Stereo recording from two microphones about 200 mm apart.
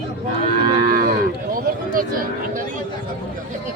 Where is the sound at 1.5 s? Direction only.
45° right (ahead or behind).